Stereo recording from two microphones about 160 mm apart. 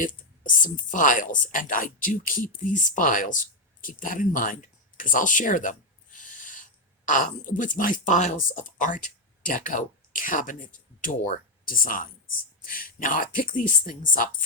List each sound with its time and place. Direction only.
0.0 s speech: 55° left (ahead or behind)